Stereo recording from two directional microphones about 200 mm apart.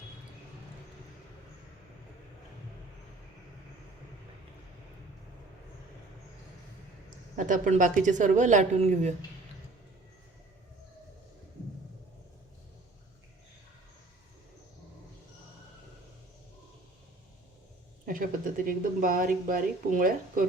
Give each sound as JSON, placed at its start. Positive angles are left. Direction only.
{"t": 7.3, "sound": "a woman's voice", "side_deg": -40}
{"t": 18.0, "sound": "speech", "side_deg": -45}